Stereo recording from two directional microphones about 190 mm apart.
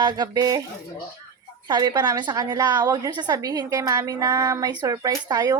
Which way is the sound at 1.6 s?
20° right (ahead or behind).